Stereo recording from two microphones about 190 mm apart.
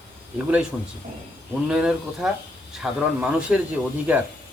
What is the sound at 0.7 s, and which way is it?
Speech, centre (ahead or behind).